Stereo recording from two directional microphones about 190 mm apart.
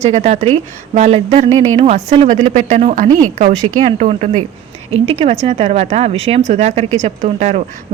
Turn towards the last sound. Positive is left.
turn(degrees=-35)  # may be behind; listen again after turning